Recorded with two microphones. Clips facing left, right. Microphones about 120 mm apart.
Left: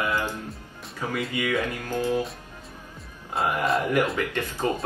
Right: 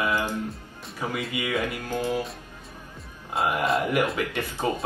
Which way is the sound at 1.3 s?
20° right (ahead or behind).